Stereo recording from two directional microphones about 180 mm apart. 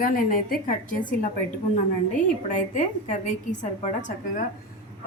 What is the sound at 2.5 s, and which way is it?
A woman's voice, 45° left (ahead or behind).